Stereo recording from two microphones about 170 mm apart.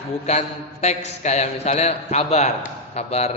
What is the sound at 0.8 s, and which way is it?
A man's voice, 40° left (ahead or behind).